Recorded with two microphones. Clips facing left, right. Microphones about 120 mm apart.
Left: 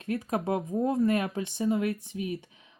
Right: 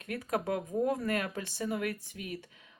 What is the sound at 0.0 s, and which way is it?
Speech, 25° left (ahead or behind).